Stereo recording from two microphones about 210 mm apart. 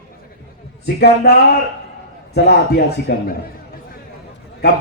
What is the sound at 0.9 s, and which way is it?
A man's voice, 50° left (ahead or behind).